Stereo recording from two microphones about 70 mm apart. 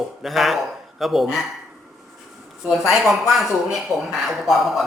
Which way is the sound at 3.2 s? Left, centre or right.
Centre.